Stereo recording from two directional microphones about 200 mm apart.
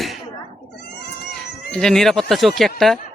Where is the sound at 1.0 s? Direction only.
55° left (ahead or behind).